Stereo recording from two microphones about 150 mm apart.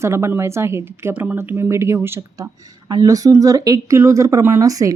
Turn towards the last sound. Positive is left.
turn(degrees=-20)  # may be behind; listen again after turning